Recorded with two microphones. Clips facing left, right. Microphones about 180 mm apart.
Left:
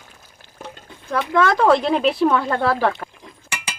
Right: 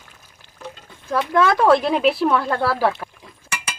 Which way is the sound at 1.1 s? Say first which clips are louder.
Even; 5° right (ahead or behind).